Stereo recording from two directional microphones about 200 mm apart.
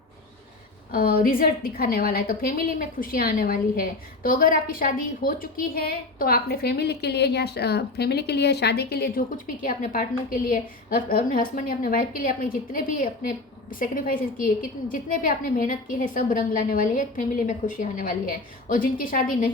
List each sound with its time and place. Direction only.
0.9 s a woman's voice: 45° left (ahead or behind)